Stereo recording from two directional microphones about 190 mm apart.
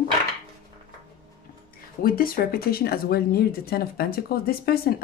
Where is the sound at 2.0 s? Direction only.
50° left (ahead or behind).